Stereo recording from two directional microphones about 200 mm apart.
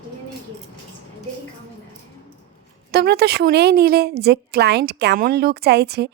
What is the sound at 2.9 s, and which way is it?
A woman's voice, 55° right (ahead or behind).